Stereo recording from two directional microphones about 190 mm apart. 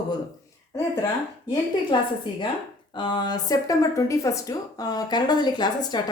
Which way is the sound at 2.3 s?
25° left (ahead or behind).